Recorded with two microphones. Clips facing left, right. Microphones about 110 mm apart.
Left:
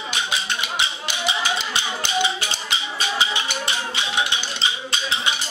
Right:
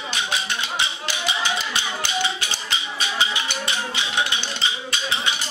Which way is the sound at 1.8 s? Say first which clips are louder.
Left 2 dB; 15° left (ahead or behind).